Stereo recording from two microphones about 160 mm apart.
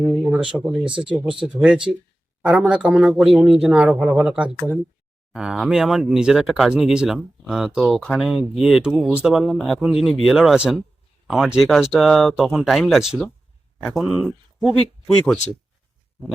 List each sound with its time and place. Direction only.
0.0 s speech: 5° right (ahead or behind)
0.9 s speech: 30° right (ahead or behind)
1.1 s speech: 5° right (ahead or behind)